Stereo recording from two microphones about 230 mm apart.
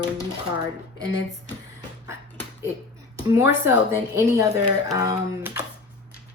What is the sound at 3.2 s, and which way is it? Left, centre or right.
Speech, centre.